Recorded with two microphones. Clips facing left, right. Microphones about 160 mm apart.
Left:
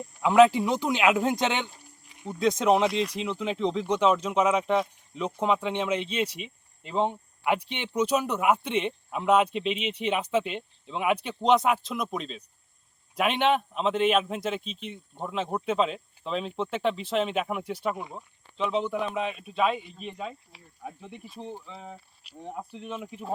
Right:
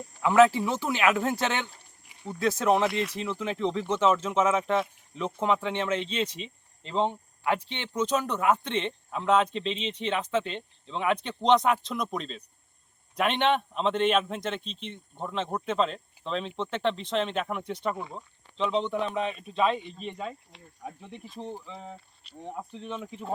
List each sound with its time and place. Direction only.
0.2 s speech: 15° left (ahead or behind)
2.8 s speech: centre (ahead or behind)
3.2 s speech: 15° left (ahead or behind)